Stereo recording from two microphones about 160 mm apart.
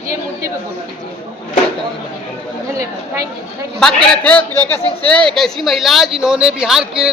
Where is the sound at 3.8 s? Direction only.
5° left (ahead or behind).